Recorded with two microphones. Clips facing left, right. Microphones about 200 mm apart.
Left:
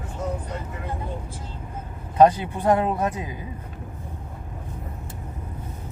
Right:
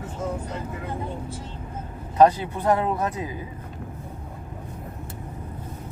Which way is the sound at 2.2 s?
20° left (ahead or behind).